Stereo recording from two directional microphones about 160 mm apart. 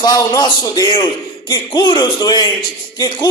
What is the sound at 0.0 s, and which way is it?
Speech, 25° left (ahead or behind).